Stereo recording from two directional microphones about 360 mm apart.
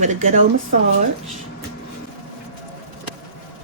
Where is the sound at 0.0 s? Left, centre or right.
Centre.